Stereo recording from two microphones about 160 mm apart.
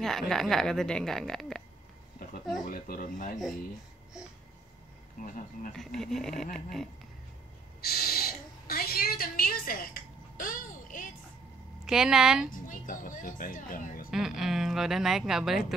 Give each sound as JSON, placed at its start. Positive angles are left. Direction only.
{"t": 0.0, "sound": "a woman's voice", "side_deg": 0}
{"t": 2.6, "sound": "speech", "side_deg": 65}
{"t": 5.2, "sound": "speech", "side_deg": 55}
{"t": 5.7, "sound": "a woman's voice", "side_deg": 5}
{"t": 7.8, "sound": "a sound", "side_deg": 75}
{"t": 11.8, "sound": "a woman's voice", "side_deg": -5}
{"t": 12.4, "sound": "a woman's voice", "side_deg": 60}
{"t": 14.1, "sound": "a woman's voice", "side_deg": -5}